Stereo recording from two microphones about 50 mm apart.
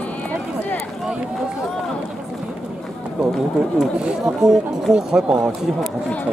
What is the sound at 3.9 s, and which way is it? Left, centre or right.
Speech, centre.